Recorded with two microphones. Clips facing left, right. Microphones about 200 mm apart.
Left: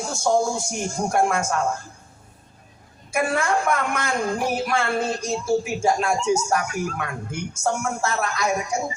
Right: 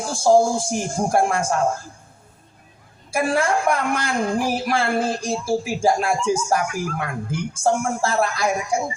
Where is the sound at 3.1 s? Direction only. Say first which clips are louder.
Right 2 dB; 30° right (ahead or behind).